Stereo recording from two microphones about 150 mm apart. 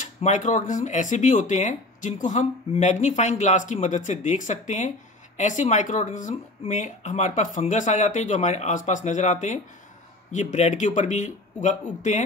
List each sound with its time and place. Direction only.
0.0 s speech: 55° left (ahead or behind)